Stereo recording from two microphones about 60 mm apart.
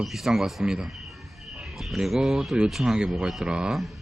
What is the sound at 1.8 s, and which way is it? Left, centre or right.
Speech, centre.